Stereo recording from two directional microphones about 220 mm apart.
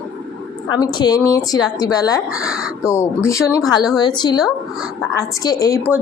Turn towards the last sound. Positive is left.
turn(degrees=15)  # may be behind; listen again after turning